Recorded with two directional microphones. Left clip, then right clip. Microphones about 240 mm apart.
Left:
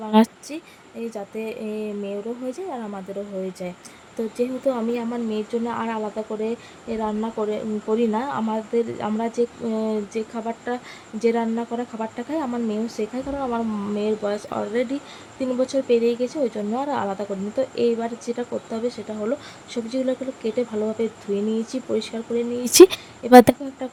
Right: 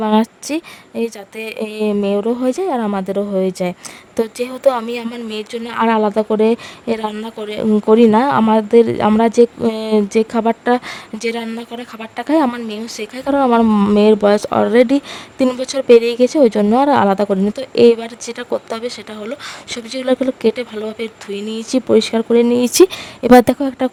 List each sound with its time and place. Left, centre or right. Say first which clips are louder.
0.4 s speech: right 12 dB; right
22.6 s speech: even; centre
23.8 s speech: right 13 dB; right